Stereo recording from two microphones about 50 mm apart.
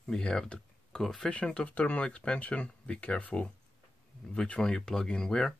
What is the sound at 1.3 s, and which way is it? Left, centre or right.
Speech, left.